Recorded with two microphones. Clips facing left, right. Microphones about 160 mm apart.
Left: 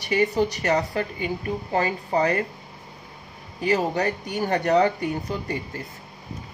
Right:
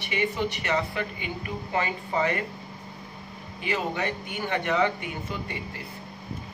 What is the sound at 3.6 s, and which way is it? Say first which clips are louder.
Speech: left 6 dB; 40° left (ahead or behind).